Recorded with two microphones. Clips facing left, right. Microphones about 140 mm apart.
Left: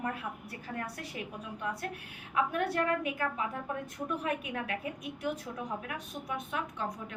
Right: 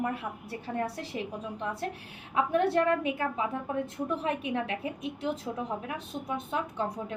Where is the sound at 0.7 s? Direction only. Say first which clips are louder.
Right 6 dB; 25° right (ahead or behind).